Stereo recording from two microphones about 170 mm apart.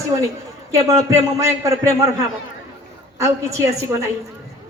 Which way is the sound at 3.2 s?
15° right (ahead or behind).